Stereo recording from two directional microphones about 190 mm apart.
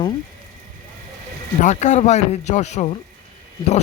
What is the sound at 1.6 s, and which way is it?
Speech, 40° left (ahead or behind).